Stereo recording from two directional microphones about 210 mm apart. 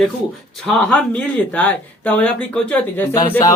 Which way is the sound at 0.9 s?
5° left (ahead or behind).